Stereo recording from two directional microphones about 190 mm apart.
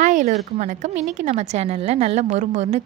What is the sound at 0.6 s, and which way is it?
A woman's voice, 40° right (ahead or behind).